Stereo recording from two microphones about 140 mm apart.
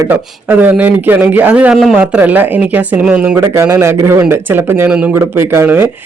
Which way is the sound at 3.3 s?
20° right (ahead or behind).